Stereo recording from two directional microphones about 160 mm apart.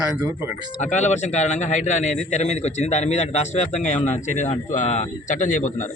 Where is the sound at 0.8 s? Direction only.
45° left (ahead or behind).